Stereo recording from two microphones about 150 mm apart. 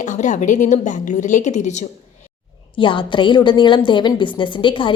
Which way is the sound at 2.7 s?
35° left (ahead or behind).